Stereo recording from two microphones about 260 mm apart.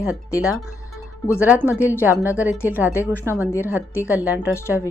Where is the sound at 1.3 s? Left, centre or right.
Centre.